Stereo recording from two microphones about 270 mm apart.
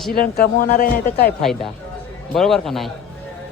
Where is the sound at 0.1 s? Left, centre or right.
Left.